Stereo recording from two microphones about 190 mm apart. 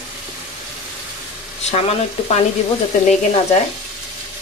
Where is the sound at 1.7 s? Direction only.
35° left (ahead or behind).